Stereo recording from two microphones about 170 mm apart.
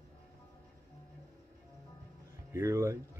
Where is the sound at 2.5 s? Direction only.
15° right (ahead or behind).